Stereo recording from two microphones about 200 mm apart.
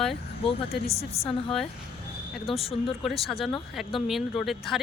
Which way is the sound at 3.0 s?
Centre (ahead or behind).